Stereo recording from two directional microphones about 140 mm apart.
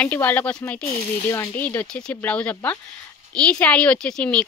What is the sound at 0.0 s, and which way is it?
A woman's voice, 10° left (ahead or behind).